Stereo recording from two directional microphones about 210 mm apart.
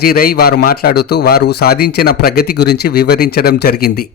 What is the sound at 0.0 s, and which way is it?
A man's voice, 45° left (ahead or behind).